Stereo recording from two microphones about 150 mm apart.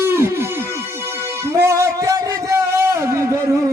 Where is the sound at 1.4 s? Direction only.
20° right (ahead or behind).